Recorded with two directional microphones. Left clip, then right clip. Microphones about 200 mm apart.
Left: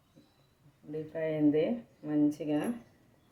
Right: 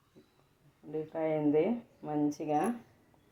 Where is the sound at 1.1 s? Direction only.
10° right (ahead or behind).